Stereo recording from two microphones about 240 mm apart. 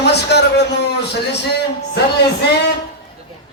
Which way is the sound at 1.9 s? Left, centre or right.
Left.